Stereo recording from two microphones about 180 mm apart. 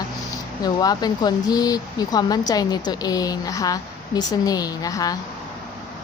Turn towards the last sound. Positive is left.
turn(degrees=20)  # may be behind; listen again after turning